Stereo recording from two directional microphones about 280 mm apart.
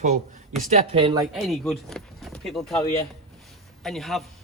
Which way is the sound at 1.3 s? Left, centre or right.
Centre.